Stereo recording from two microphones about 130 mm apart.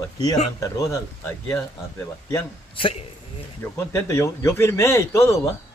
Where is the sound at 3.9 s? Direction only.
20° left (ahead or behind).